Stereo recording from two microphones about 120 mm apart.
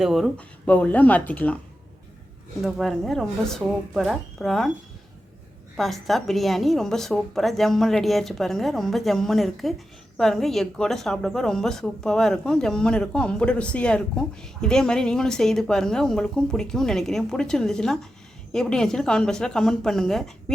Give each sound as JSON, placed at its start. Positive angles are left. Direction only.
{"t": 0.0, "sound": "a woman's voice", "side_deg": 0}
{"t": 0.3, "sound": "speech", "side_deg": 10}
{"t": 2.6, "sound": "a woman's voice", "side_deg": 0}
{"t": 5.7, "sound": "a woman's voice", "side_deg": 0}